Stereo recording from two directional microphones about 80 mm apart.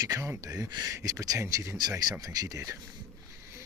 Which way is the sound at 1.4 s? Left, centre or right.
Right.